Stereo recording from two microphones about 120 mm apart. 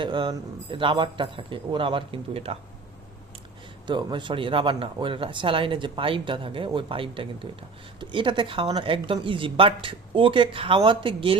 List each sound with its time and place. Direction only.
0.0 s speech: 40° right (ahead or behind)
3.8 s speech: 40° right (ahead or behind)